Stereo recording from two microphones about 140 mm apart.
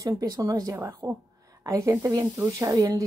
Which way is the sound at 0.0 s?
25° right (ahead or behind).